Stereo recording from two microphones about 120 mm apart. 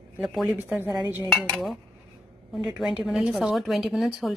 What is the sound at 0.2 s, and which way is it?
Speech, 5° right (ahead or behind).